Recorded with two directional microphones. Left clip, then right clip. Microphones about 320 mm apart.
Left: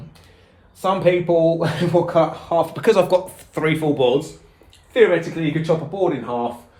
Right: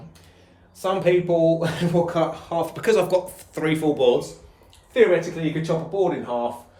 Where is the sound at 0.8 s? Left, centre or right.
Centre.